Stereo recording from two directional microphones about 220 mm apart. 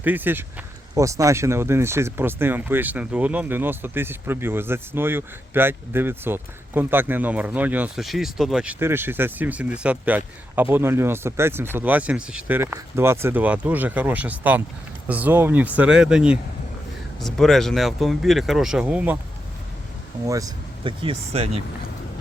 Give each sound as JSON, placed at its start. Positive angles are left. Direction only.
{"t": 0.0, "sound": "speech", "side_deg": -10}
{"t": 20.2, "sound": "speech", "side_deg": -15}